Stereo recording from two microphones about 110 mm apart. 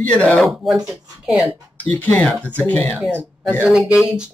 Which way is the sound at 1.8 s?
15° left (ahead or behind).